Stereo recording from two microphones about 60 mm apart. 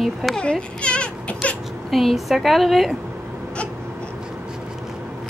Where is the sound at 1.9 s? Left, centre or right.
Centre.